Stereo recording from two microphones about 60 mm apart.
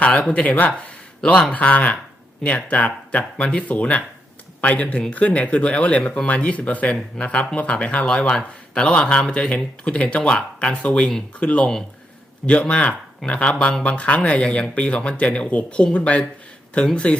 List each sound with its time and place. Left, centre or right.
0.0 s speech: left
0.9 s a sound: centre
1.5 s speech: left